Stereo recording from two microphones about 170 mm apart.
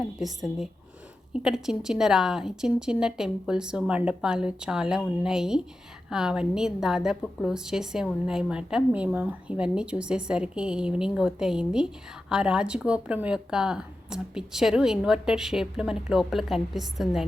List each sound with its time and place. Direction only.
0.0 s a woman's voice: centre (ahead or behind)